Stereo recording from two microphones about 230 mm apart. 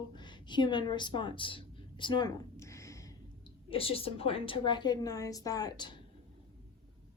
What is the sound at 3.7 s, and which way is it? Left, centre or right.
A woman's voice, left.